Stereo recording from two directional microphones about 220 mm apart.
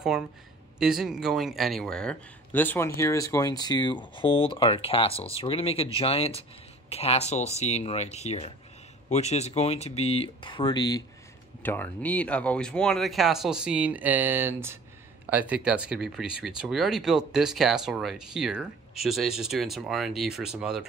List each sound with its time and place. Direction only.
0.7 s speech: centre (ahead or behind)